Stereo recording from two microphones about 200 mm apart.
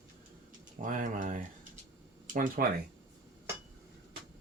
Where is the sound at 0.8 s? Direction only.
40° right (ahead or behind).